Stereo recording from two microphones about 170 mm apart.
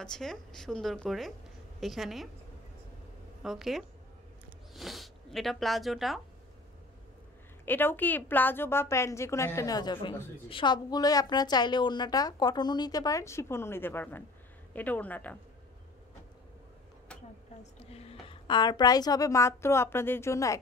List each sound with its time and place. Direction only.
0.0 s a woman's voice: 5° left (ahead or behind)
3.4 s a woman's voice: centre (ahead or behind)
7.6 s a woman's voice: 10° left (ahead or behind)
17.7 s a woman's voice: 35° left (ahead or behind); by 20.5 s 20° left (ahead or behind)